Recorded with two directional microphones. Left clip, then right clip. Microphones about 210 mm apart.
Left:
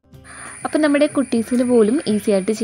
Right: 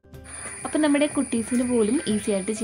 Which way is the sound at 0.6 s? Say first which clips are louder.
Left 6 dB; 20° left (ahead or behind).